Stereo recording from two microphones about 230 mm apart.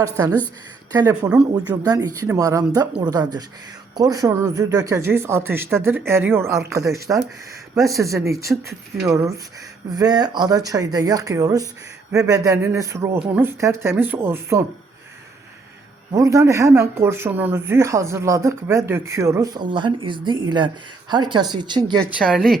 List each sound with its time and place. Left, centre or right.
0.0 s speech: centre
1.5 s speech: centre
16.1 s speech: centre
22.0 s speech: centre